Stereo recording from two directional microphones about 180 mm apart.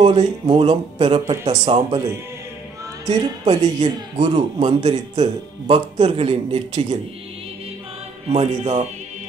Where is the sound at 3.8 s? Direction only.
40° right (ahead or behind).